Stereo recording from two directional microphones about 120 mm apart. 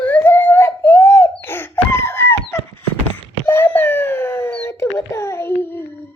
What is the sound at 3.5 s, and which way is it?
Wail, 15° left (ahead or behind).